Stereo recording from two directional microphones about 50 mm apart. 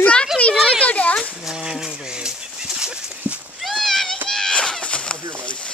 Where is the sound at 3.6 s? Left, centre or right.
Centre.